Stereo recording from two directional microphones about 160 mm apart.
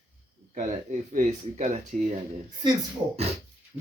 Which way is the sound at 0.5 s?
50° right (ahead or behind).